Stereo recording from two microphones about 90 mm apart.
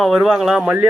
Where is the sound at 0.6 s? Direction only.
15° right (ahead or behind).